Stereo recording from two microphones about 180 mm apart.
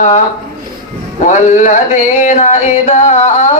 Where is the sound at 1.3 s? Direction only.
40° left (ahead or behind).